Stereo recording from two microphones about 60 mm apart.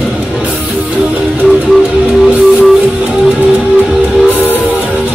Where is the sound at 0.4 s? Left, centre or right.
Right.